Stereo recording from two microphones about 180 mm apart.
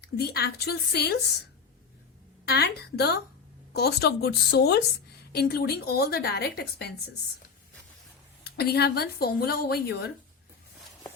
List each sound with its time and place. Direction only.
0.2 s a woman's voice: 60° left (ahead or behind)
2.4 s a woman's voice: 65° left (ahead or behind)
8.4 s a woman's voice: 60° left (ahead or behind)